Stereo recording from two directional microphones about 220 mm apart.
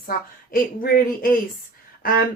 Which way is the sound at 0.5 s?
40° left (ahead or behind).